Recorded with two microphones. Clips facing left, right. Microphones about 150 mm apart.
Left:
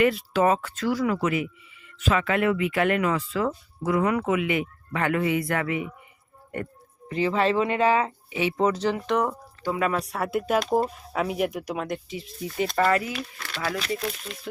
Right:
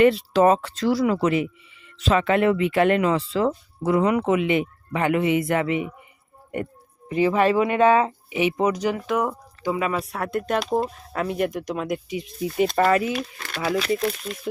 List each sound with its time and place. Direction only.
0.0 s speech: 30° right (ahead or behind)
7.1 s speech: 15° right (ahead or behind); by 11.9 s 5° left (ahead or behind)
12.0 s speech: 15° right (ahead or behind)
13.1 s speech: 45° right (ahead or behind)